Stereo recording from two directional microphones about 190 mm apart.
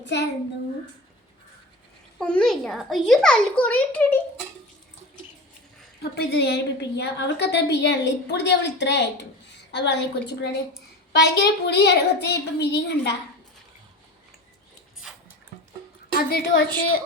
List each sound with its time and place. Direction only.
0.0 s a child's voice: 65° left (ahead or behind)
2.1 s a child's voice: 5° left (ahead or behind)
6.0 s a woman's voice: 60° left (ahead or behind)
16.3 s a woman's voice: 55° left (ahead or behind)